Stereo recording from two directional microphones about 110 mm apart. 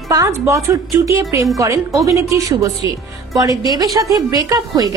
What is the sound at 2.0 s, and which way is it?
Speech, 30° right (ahead or behind).